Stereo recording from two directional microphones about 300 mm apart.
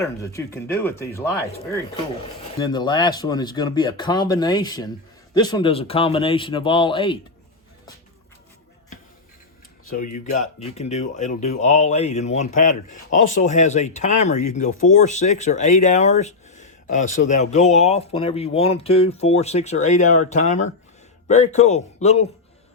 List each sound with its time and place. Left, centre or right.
0.0 s speech: centre
2.6 s speech: centre
9.9 s speech: left